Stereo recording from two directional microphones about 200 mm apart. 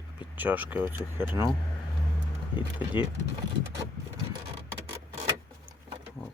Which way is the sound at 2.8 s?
10° right (ahead or behind).